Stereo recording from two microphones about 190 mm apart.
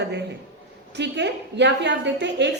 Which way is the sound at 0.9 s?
65° right (ahead or behind).